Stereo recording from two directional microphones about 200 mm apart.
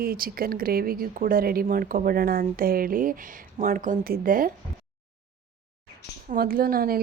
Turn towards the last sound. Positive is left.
turn(degrees=-45)  # may be behind; listen again after turning